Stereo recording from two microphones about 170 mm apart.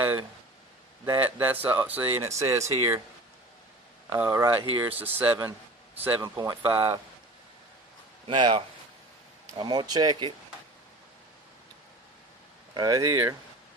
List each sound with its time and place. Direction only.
0.0 s a sound: 10° right (ahead or behind)
1.0 s speech: 15° right (ahead or behind)
4.1 s speech: 15° right (ahead or behind)
8.3 s speech: 30° right (ahead or behind)
12.7 s speech: 20° right (ahead or behind)